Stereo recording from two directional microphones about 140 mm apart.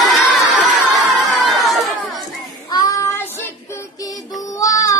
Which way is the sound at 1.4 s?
Centre (ahead or behind).